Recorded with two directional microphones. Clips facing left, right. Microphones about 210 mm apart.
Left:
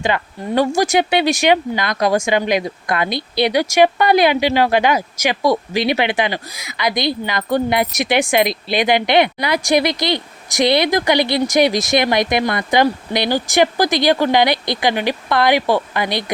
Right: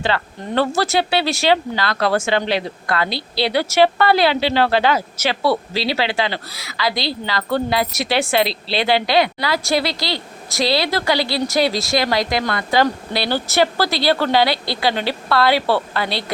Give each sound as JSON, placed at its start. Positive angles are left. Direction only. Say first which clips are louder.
{"t": 0.0, "sound": "speech", "louder": "left 2 dB", "side_deg": 15}